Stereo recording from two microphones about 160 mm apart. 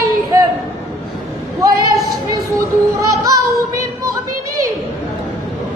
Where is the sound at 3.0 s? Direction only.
20° right (ahead or behind).